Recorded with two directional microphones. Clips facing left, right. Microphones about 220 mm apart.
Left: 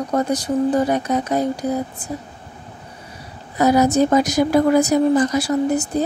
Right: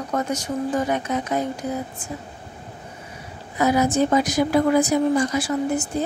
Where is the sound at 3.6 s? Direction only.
40° left (ahead or behind).